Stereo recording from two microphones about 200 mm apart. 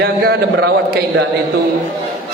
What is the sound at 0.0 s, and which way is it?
A man's voice, 55° right (ahead or behind).